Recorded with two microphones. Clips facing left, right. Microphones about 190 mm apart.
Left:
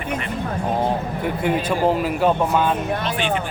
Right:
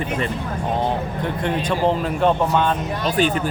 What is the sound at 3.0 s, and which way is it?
Speech, 40° right (ahead or behind).